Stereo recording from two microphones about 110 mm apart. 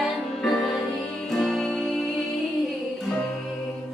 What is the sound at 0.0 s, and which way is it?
Music, centre (ahead or behind).